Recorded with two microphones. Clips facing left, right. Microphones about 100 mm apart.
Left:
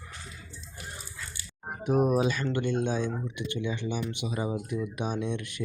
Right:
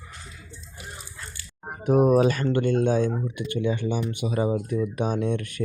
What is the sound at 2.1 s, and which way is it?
Speech, 50° right (ahead or behind).